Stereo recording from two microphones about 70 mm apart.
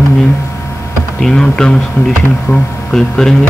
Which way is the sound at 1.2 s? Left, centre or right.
Centre.